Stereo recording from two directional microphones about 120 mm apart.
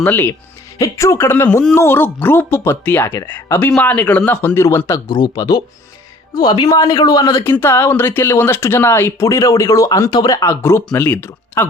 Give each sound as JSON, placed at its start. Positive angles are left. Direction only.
{"t": 0.0, "sound": "speech", "side_deg": 15}
{"t": 0.8, "sound": "speech", "side_deg": 25}
{"t": 5.0, "sound": "a woman's voice", "side_deg": 35}